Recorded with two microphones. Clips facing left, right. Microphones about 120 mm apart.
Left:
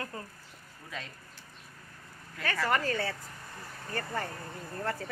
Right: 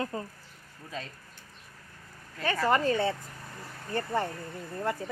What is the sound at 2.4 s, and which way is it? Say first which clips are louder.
A woman's voice: right 4 dB; 25° right (ahead or behind).